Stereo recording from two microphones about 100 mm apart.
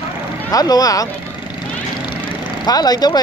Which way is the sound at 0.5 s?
40° left (ahead or behind).